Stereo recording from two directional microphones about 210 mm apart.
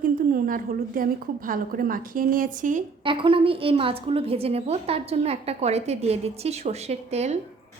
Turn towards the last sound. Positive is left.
turn(degrees=-30)  # may be behind; listen again after turning